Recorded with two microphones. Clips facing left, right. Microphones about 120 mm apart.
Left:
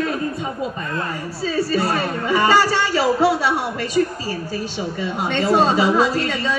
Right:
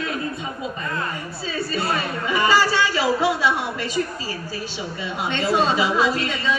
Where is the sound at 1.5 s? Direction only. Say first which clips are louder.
Left 5 dB; 40° left (ahead or behind).